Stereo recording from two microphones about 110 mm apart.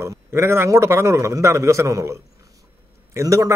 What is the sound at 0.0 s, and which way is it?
A man's voice, 25° right (ahead or behind).